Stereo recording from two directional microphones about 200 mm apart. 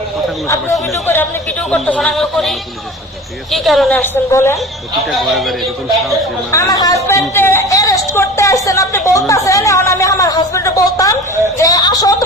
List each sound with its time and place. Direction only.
0.4 s speech: 15° left (ahead or behind)
5.0 s speech: centre (ahead or behind)
6.5 s speech: 15° left (ahead or behind)